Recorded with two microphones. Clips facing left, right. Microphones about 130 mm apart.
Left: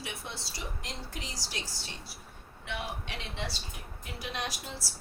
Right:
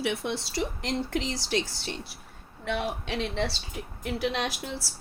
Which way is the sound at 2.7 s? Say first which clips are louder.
Right 8 dB; 90° right.